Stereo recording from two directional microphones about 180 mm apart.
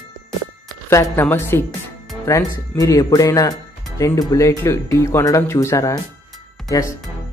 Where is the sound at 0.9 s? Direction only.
15° left (ahead or behind).